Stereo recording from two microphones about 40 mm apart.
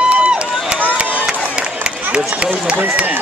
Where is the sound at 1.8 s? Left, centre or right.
Right.